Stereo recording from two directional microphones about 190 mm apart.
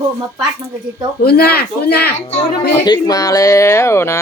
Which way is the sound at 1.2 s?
55° left (ahead or behind).